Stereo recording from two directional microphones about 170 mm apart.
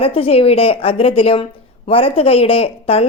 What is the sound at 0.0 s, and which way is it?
A woman's voice, 35° left (ahead or behind).